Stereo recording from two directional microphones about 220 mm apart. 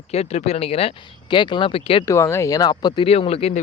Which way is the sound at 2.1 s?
10° left (ahead or behind).